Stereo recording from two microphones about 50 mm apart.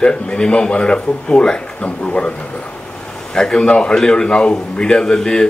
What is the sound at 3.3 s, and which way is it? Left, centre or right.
Speech, centre.